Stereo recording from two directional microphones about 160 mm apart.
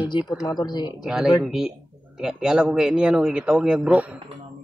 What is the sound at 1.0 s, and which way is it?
A man's voice, 5° right (ahead or behind).